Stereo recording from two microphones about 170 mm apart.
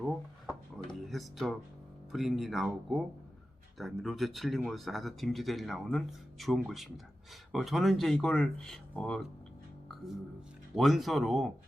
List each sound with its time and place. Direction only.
0.9 s music: centre (ahead or behind)
2.1 s speech: centre (ahead or behind)
10.8 s speech: centre (ahead or behind)